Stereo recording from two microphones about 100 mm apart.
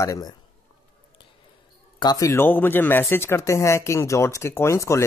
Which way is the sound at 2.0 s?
35° left (ahead or behind).